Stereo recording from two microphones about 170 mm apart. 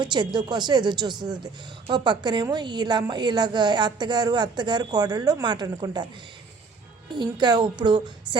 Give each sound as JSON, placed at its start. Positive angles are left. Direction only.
{"t": 0.0, "sound": "a woman's voice", "side_deg": -25}
{"t": 7.1, "sound": "a woman's voice", "side_deg": -25}